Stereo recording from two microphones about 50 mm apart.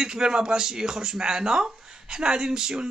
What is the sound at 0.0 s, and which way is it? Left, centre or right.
Speech, centre.